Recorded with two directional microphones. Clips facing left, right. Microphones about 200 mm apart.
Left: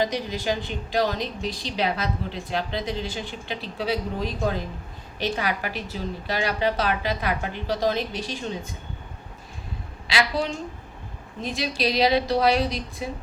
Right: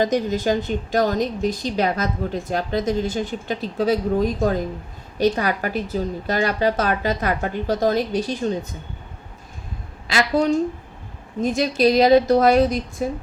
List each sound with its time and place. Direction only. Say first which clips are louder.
0.0 s a woman's voice: right 6 dB; 45° right (ahead or behind)
10.1 s a woman's voice: right 7 dB; 45° right (ahead or behind)